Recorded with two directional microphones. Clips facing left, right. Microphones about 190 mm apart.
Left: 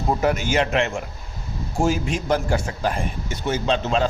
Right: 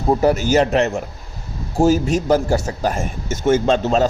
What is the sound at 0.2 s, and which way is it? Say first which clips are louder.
A man's voice: right 6 dB; 35° right (ahead or behind).